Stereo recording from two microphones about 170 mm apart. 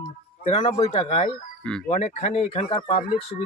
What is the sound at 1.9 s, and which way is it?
Speech, 40° left (ahead or behind).